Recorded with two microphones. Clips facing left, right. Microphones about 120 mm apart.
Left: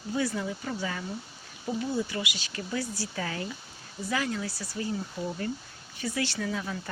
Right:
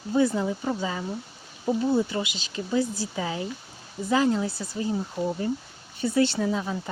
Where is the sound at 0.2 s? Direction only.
25° right (ahead or behind).